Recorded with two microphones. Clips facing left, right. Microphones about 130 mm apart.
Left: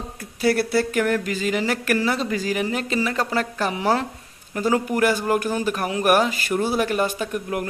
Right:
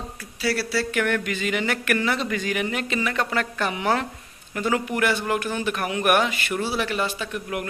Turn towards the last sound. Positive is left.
turn(degrees=45)  # may be behind; listen again after turning